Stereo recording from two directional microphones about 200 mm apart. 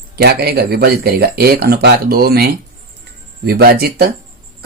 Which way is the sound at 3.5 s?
50° right (ahead or behind).